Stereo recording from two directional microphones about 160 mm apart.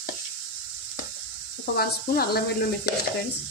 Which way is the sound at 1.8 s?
70° left (ahead or behind).